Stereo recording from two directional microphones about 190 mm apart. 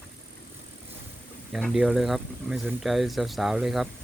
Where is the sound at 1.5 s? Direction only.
Centre (ahead or behind).